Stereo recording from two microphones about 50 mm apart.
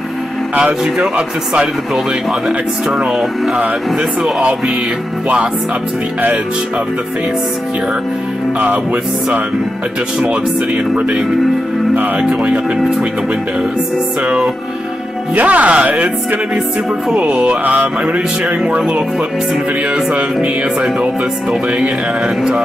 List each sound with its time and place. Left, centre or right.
0.9 s music: centre
12.2 s music: right
14.2 s music: right